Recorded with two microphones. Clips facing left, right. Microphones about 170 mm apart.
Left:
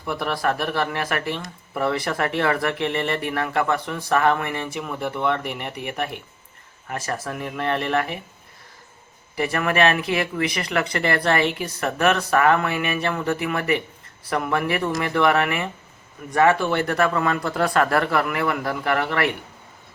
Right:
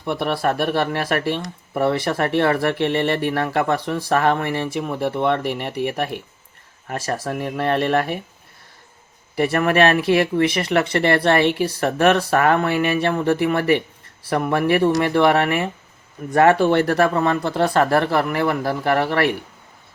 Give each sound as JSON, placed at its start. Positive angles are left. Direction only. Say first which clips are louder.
{"t": 0.0, "sound": "speech", "louder": "right 3 dB", "side_deg": -25}
{"t": 9.3, "sound": "speech", "louder": "right 5 dB", "side_deg": -40}